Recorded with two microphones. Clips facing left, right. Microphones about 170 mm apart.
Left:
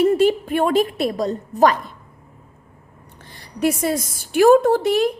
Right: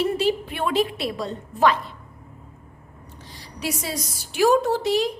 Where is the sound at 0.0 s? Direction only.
50° left (ahead or behind).